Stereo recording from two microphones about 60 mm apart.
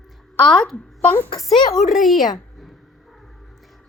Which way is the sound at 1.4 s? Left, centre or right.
Centre.